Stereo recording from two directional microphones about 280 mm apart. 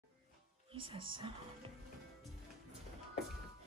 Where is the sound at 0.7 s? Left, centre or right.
Centre.